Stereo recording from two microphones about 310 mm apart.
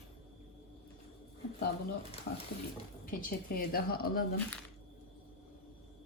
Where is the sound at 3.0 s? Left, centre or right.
Left.